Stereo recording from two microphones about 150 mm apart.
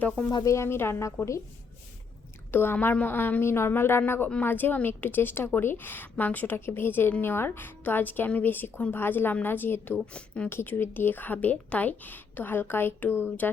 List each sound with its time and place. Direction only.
0.3 s speech: 25° left (ahead or behind)
2.5 s a woman's voice: 15° left (ahead or behind)